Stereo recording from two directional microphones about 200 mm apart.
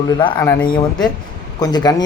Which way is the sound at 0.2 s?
25° left (ahead or behind).